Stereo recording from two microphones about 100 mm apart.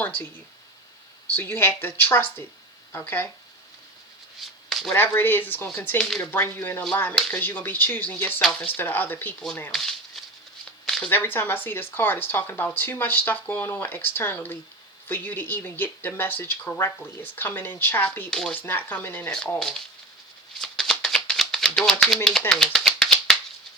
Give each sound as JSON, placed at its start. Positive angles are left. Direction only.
{"t": 0.0, "sound": "speech", "side_deg": 15}
{"t": 1.3, "sound": "speech", "side_deg": 20}
{"t": 4.4, "sound": "a sound", "side_deg": 0}
{"t": 4.9, "sound": "speech", "side_deg": 20}
{"t": 6.0, "sound": "speech", "side_deg": 5}
{"t": 6.3, "sound": "speech", "side_deg": 20}
{"t": 9.7, "sound": "a sound", "side_deg": 5}
{"t": 11.1, "sound": "speech", "side_deg": 20}
{"t": 18.3, "sound": "speech", "side_deg": 5}
{"t": 18.6, "sound": "speech", "side_deg": 20}
{"t": 19.5, "sound": "speech", "side_deg": 5}
{"t": 20.6, "sound": "shuffling cards", "side_deg": 5}
{"t": 21.9, "sound": "speech", "side_deg": 5}